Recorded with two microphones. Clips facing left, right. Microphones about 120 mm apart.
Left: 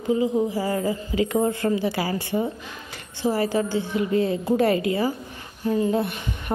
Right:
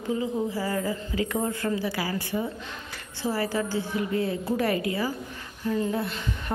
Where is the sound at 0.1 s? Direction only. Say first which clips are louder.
Left 6 dB; 15° left (ahead or behind).